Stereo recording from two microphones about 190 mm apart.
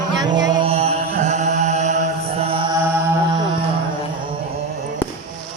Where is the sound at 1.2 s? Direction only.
40° right (ahead or behind).